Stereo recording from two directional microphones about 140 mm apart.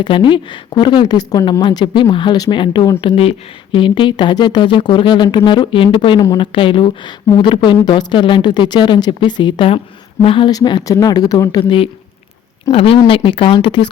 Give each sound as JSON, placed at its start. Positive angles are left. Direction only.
{"t": 0.0, "sound": "a woman's voice", "side_deg": 35}
{"t": 12.7, "sound": "speech", "side_deg": 40}